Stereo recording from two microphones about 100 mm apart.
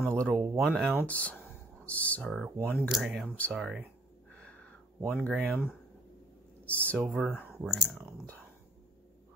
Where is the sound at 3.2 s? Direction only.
15° left (ahead or behind).